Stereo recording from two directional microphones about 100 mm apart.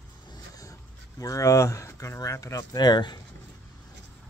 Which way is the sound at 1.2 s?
35° left (ahead or behind).